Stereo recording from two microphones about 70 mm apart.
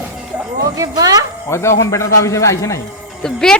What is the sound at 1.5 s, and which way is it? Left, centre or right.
A man's voice, left.